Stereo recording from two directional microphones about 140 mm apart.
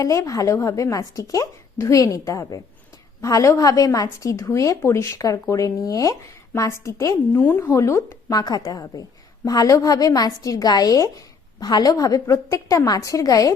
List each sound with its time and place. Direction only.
0.0 s a woman's voice: 25° left (ahead or behind)